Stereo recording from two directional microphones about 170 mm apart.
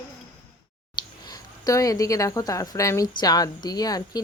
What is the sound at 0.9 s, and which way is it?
Speech, 25° left (ahead or behind).